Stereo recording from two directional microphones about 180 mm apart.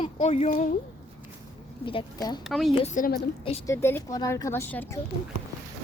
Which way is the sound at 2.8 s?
45° left (ahead or behind).